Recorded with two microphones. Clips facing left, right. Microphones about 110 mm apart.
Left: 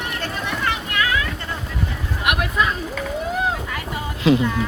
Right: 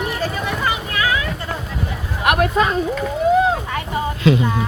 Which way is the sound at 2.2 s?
40° right (ahead or behind).